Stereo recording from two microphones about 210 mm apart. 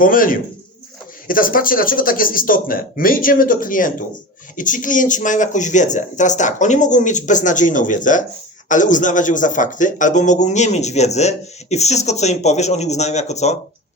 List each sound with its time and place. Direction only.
0.0 s speech: 40° left (ahead or behind)